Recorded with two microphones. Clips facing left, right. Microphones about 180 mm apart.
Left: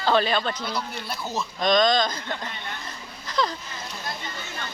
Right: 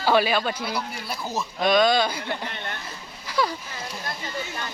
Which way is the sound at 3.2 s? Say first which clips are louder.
Right 1 dB; 10° right (ahead or behind).